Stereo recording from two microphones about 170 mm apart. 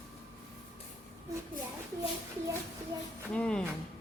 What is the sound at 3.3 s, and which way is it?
Speech, 5° left (ahead or behind).